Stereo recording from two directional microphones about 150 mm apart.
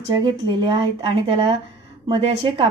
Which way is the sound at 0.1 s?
30° right (ahead or behind).